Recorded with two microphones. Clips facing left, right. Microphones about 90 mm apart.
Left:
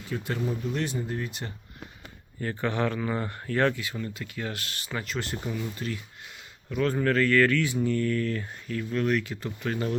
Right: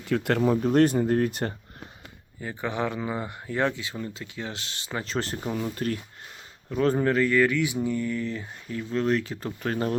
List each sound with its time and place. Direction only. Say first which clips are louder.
0.1 s speech: right 8 dB; 75° right (ahead or behind); by 1.5 s 50° right (ahead or behind)
2.4 s speech: left 1 dB; 15° right (ahead or behind); by 6.0 s 45° right (ahead or behind)
6.7 s speech: right 2 dB; 30° right (ahead or behind)